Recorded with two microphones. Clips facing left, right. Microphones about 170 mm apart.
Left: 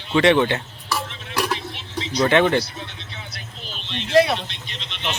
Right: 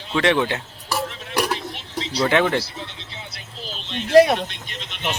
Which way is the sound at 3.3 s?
35° right (ahead or behind).